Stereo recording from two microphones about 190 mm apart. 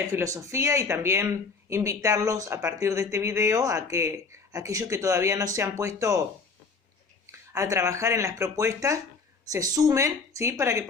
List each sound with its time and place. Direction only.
0.1 s speech: 15° right (ahead or behind)
7.3 s speech: 15° right (ahead or behind)